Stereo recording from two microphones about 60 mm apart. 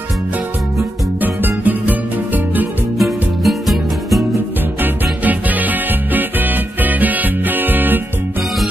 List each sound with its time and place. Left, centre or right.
1.2 s music: right
3.0 s music: centre
4.8 s music: right